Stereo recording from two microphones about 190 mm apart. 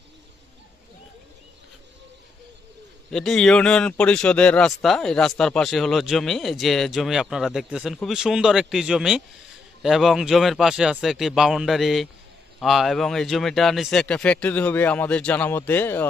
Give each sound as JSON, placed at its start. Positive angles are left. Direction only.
{"t": 3.1, "sound": "speech", "side_deg": 5}